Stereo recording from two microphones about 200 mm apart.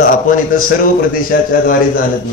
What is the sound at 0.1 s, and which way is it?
A man's voice, 45° left (ahead or behind).